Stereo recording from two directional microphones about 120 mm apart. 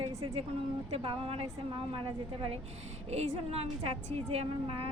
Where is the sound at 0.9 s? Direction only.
50° right (ahead or behind).